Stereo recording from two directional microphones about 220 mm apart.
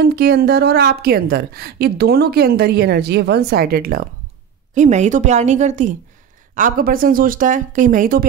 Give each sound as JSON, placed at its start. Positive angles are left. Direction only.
{"t": 0.0, "sound": "a woman's voice", "side_deg": -45}
{"t": 4.7, "sound": "speech", "side_deg": -30}